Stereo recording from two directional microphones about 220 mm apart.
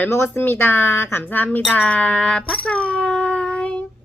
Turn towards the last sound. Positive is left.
turn(degrees=5)  # may be behind; listen again after turning